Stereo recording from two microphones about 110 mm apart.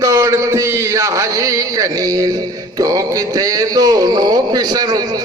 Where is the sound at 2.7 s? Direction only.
30° right (ahead or behind).